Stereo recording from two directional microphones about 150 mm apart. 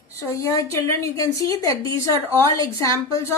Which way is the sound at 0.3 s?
20° left (ahead or behind).